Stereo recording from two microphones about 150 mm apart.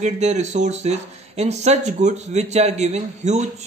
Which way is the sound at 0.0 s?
50° right (ahead or behind).